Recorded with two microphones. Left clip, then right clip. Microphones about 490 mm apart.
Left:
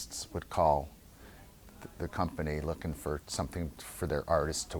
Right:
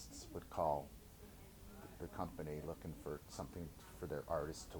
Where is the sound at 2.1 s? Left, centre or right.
Left.